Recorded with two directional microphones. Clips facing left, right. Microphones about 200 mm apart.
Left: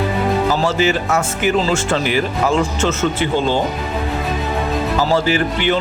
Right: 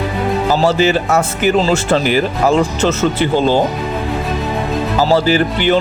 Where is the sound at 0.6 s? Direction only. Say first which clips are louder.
Right 4 dB; 35° right (ahead or behind).